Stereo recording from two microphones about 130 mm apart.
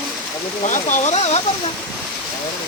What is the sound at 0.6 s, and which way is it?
Speech, 70° left (ahead or behind).